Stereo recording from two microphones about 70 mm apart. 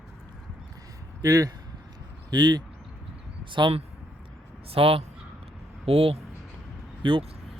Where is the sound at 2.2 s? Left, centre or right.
Right.